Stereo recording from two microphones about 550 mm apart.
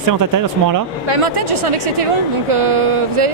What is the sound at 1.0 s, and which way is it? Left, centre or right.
Speech, right.